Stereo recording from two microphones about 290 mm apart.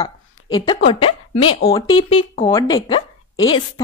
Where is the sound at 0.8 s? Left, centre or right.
Centre.